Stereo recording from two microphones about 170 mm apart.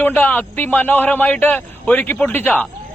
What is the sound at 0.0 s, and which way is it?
A man's voice, 10° left (ahead or behind).